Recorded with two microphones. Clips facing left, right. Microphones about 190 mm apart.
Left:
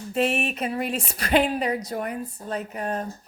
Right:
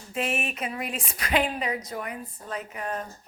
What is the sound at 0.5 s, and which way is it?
Speech, 30° left (ahead or behind).